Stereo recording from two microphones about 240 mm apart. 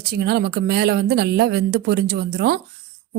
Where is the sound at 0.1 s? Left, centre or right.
Right.